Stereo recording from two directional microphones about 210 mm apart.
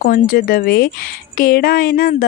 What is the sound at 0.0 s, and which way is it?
Speech, 45° left (ahead or behind).